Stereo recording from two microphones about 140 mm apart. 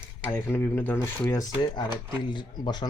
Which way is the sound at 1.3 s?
25° left (ahead or behind).